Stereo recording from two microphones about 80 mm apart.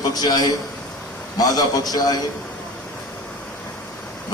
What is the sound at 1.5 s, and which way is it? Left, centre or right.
Speech, left.